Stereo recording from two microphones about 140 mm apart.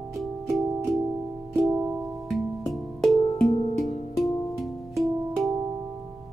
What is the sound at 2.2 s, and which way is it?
Music, centre (ahead or behind).